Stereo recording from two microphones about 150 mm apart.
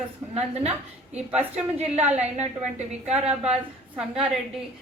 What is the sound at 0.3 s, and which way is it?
Speech, 45° right (ahead or behind).